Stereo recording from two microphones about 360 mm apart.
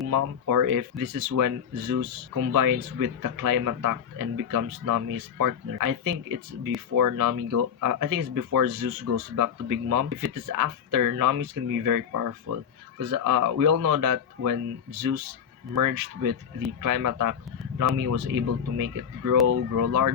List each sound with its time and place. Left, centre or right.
0.1 s speech: right
13.0 s speech: right